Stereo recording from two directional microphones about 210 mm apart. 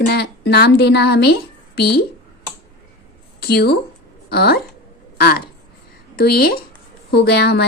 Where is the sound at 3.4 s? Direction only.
50° left (ahead or behind).